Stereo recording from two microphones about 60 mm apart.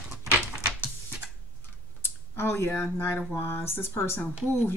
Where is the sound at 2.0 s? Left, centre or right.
Left.